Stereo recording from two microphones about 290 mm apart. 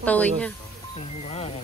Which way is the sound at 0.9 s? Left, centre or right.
Left.